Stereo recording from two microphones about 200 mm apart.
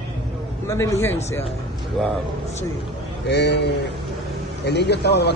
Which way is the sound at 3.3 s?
60° left (ahead or behind).